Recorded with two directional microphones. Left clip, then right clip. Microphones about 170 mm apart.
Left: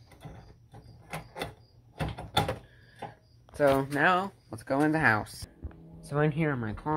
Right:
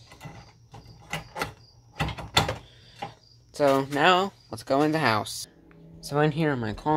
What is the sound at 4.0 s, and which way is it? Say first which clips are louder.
Speech: right 4 dB; 20° right (ahead or behind).